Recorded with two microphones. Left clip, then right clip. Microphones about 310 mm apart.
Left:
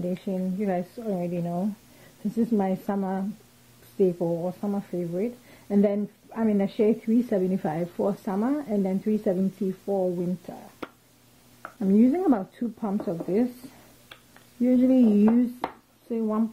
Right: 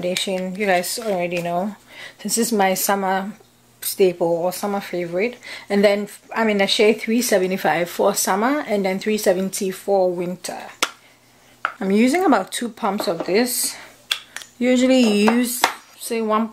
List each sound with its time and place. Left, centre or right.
0.4 s speech: centre
4.2 s speech: right
10.4 s speech: centre